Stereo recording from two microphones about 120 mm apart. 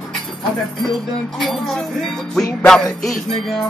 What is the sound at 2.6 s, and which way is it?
Speech, 5° left (ahead or behind).